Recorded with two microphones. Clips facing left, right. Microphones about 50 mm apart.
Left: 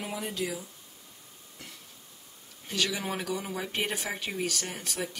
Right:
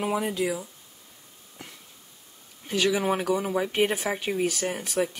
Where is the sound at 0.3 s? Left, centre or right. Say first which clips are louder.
Right 6 dB; centre.